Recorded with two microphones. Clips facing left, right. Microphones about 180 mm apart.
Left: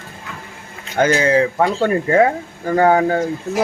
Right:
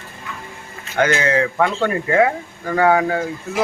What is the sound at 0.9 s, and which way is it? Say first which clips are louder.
Speech: left 3 dB; 35° left (ahead or behind).